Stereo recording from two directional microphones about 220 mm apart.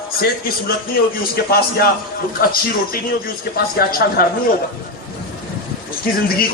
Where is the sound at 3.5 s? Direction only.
45° left (ahead or behind).